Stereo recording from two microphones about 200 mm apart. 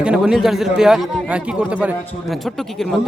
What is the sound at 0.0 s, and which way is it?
A man's voice, 5° right (ahead or behind).